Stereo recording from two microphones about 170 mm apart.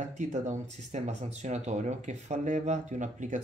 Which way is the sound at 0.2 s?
45° right (ahead or behind).